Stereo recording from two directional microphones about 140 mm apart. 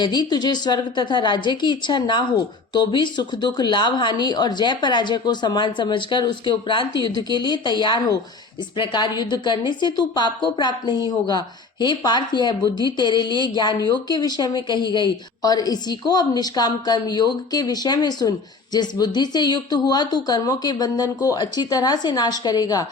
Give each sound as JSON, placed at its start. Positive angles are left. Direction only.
{"t": 0.0, "sound": "a woman's voice", "side_deg": 30}